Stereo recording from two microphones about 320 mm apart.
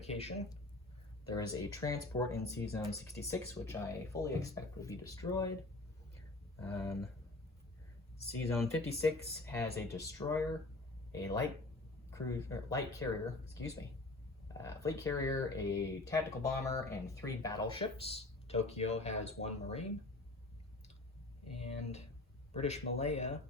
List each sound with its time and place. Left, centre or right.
0.0 s speech: centre
6.6 s speech: centre
8.4 s speech: centre
14.4 s speech: centre
21.5 s speech: centre